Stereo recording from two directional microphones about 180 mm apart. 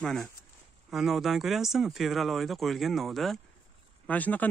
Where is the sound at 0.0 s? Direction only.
Centre (ahead or behind).